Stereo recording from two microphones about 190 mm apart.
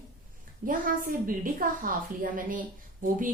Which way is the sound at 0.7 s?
45° right (ahead or behind).